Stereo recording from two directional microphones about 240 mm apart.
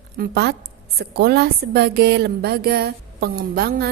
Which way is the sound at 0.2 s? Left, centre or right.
Right.